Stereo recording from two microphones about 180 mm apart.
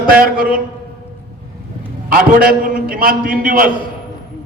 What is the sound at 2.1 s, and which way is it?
A man's voice, 55° right (ahead or behind).